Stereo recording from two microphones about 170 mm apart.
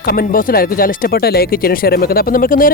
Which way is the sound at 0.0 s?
60° left (ahead or behind).